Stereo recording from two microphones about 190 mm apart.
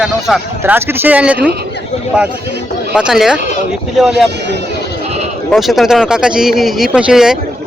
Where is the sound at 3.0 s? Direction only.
5° right (ahead or behind).